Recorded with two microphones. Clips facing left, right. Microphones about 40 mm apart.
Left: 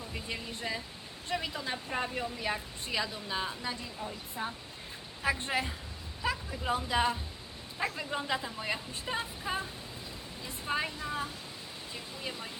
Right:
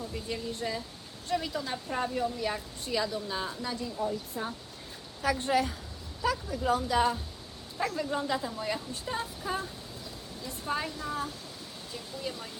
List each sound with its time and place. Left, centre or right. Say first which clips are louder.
0.1 s a woman's voice: right 3 dB; left
3.9 s a woman's voice: right 6 dB; centre
5.2 s a woman's voice: right 4 dB; left